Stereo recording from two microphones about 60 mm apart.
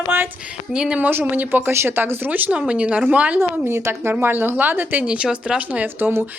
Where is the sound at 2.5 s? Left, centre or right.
Right.